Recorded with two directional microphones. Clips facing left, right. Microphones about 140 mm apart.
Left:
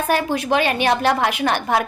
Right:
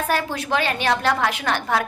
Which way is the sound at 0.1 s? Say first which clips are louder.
Left 5 dB; 15° left (ahead or behind).